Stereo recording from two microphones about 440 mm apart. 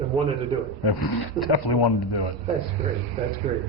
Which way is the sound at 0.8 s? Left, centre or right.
Left.